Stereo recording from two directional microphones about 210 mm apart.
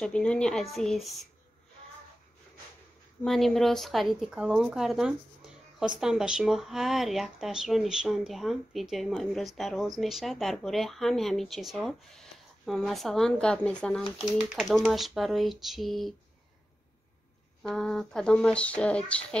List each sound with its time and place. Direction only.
0.0 s speech: 5° left (ahead or behind)
3.3 s speech: centre (ahead or behind)
17.6 s speech: centre (ahead or behind)